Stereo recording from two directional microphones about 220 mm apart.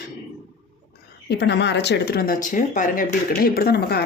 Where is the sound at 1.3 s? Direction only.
50° left (ahead or behind).